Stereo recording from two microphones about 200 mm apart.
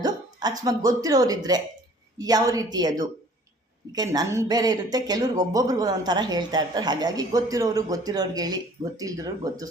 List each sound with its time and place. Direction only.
0.0 s speech: 20° right (ahead or behind)
3.9 s speech: 20° right (ahead or behind)